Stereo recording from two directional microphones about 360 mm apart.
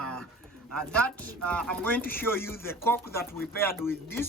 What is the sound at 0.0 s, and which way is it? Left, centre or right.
Bird, centre.